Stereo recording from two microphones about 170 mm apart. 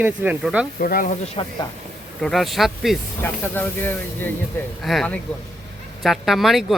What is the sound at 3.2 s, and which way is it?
Speech, 10° left (ahead or behind).